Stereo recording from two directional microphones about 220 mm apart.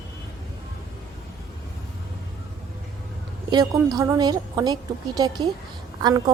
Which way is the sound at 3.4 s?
20° right (ahead or behind).